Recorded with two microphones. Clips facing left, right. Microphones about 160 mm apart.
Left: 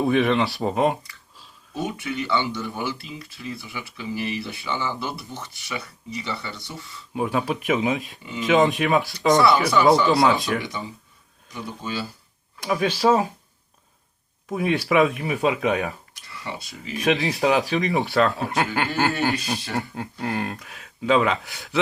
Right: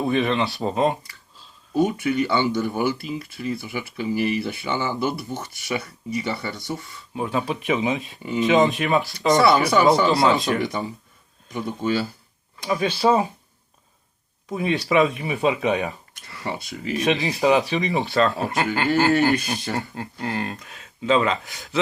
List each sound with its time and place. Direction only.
0.0 s speech: centre (ahead or behind)
1.7 s speech: 45° right (ahead or behind)
7.1 s speech: 5° left (ahead or behind)
8.2 s speech: 50° right (ahead or behind)
8.4 s speech: centre (ahead or behind)
10.7 s speech: 50° right (ahead or behind)
12.6 s speech: 5° left (ahead or behind)
14.5 s speech: 5° left (ahead or behind)
16.2 s speech: 50° right (ahead or behind)
17.0 s speech: centre (ahead or behind)